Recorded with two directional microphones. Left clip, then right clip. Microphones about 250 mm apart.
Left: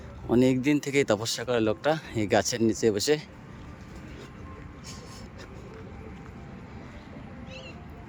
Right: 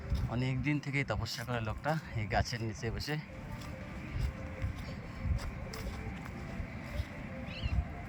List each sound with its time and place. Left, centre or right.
0.3 s speech: left